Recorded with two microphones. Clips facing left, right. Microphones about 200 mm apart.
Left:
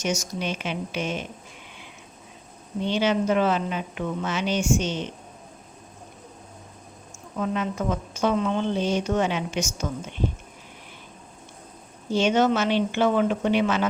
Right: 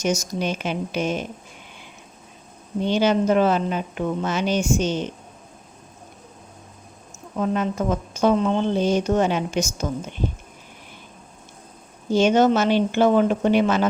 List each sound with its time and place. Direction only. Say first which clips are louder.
0.0 s speech: right 4 dB; 40° right (ahead or behind)
2.8 s speech: right 4 dB; 40° right (ahead or behind)
7.3 s speech: right 4 dB; 40° right (ahead or behind)
12.1 s speech: right 4 dB; 40° right (ahead or behind)